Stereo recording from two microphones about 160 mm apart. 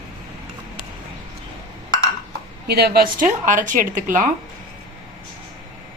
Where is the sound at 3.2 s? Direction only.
55° right (ahead or behind).